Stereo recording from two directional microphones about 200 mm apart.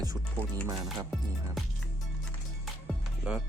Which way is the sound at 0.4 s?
10° left (ahead or behind).